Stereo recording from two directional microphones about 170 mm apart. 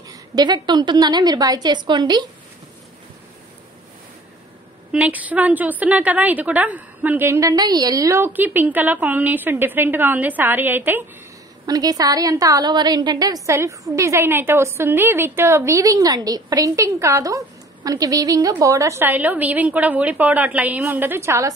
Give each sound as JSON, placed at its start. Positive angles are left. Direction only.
{"t": 0.1, "sound": "a woman's voice", "side_deg": -25}
{"t": 4.9, "sound": "a woman's voice", "side_deg": -10}